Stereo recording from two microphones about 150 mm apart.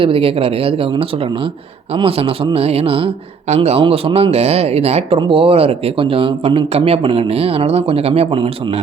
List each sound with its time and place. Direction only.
0.0 s a man's voice: 40° right (ahead or behind)